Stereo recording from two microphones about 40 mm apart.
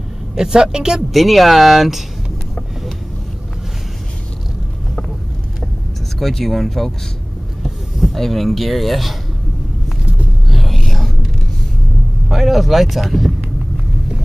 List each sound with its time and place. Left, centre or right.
0.4 s speech: centre
1.1 s speech: centre
6.1 s speech: centre
10.5 s a sound: centre
12.3 s speech: centre